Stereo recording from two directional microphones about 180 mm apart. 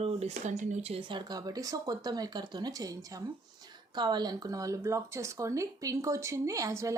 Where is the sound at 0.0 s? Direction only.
35° right (ahead or behind).